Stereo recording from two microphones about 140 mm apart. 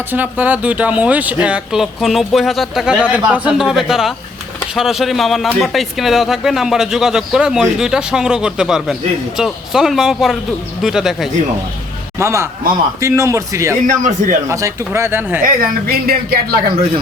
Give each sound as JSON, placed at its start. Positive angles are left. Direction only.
{"t": 0.1, "sound": "speech", "side_deg": -10}
{"t": 12.2, "sound": "speech", "side_deg": -20}
{"t": 13.8, "sound": "speech", "side_deg": -65}
{"t": 14.5, "sound": "speech", "side_deg": -20}
{"t": 15.4, "sound": "speech", "side_deg": -90}